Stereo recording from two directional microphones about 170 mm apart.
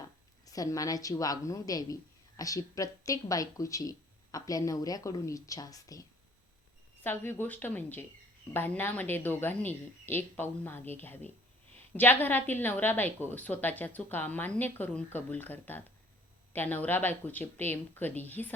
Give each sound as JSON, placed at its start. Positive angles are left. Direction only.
{"t": 0.4, "sound": "a woman's voice", "side_deg": 20}